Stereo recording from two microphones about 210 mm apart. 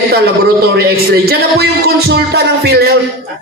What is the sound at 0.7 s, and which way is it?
Speech, 45° right (ahead or behind).